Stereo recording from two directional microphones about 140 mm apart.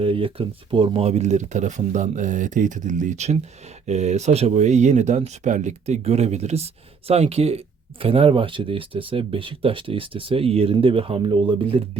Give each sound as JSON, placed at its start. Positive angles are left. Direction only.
{"t": 0.0, "sound": "speech", "side_deg": -40}